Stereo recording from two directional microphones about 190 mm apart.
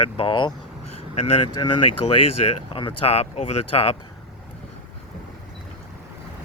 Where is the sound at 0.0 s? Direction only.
30° left (ahead or behind).